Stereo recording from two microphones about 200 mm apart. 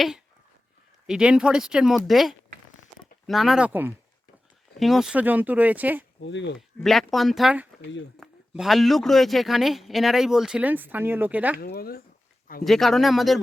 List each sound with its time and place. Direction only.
1.0 s speech: 5° right (ahead or behind)
6.2 s speech: 60° left (ahead or behind)
6.8 s speech: centre (ahead or behind)
11.6 s speech: 50° left (ahead or behind)
12.6 s speech: centre (ahead or behind)